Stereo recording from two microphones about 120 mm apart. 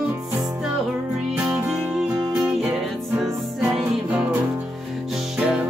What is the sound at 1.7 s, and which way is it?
Music, 5° right (ahead or behind).